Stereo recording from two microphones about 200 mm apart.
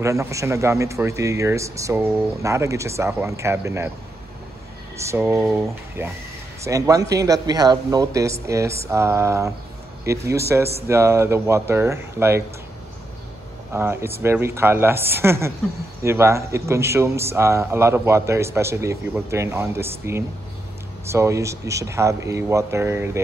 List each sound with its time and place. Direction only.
0.0 s speech: 15° right (ahead or behind)
4.9 s speech: 15° right (ahead or behind)
13.7 s speech: 10° right (ahead or behind)